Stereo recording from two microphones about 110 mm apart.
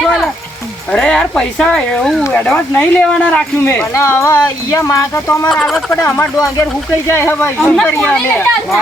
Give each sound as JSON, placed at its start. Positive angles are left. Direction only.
{"t": 0.9, "sound": "speech", "side_deg": 5}
{"t": 3.7, "sound": "speech", "side_deg": 25}
{"t": 5.5, "sound": "speech", "side_deg": 0}
{"t": 5.9, "sound": "speech", "side_deg": 25}
{"t": 7.6, "sound": "speech", "side_deg": 5}